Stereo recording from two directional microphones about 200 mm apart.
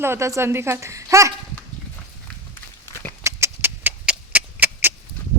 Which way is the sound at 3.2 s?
10° right (ahead or behind).